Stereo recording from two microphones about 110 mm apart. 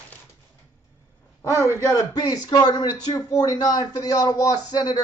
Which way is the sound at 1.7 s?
30° left (ahead or behind).